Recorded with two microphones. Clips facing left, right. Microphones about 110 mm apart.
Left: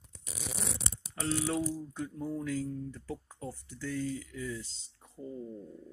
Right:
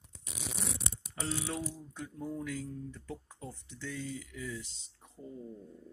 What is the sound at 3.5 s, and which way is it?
Speech, 20° right (ahead or behind).